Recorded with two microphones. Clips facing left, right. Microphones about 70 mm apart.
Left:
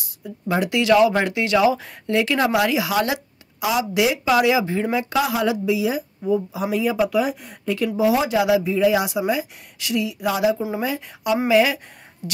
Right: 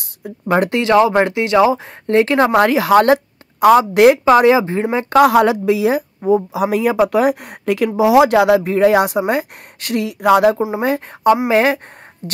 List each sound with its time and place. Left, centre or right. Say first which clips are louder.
0.2 s a woman's voice: right 7 dB; right
0.7 s speech: right 1 dB; right
2.0 s speech: right 7 dB; right
4.9 s a woman's voice: right 13 dB; right